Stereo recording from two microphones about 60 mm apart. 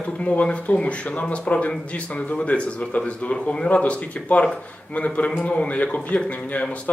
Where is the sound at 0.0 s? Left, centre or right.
Left.